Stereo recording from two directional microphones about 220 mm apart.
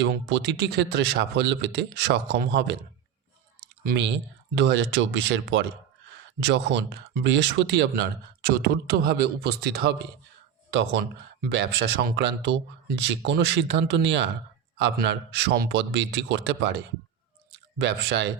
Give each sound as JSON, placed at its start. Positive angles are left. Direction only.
{"t": 0.0, "sound": "speech", "side_deg": -50}
{"t": 3.8, "sound": "speech", "side_deg": -55}
{"t": 11.5, "sound": "speech", "side_deg": -50}
{"t": 17.7, "sound": "speech", "side_deg": -55}